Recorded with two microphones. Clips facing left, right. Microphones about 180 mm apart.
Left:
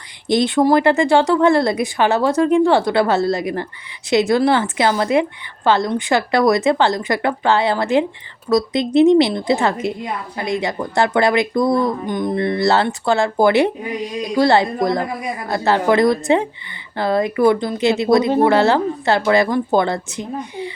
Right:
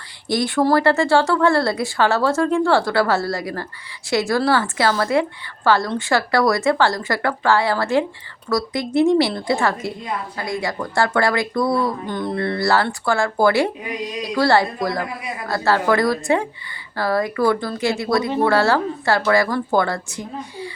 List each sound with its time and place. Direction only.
0.3 s speech: 20° left (ahead or behind)